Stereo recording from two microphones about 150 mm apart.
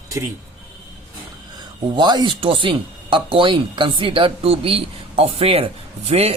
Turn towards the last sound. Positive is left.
turn(degrees=-40)  # may be behind; listen again after turning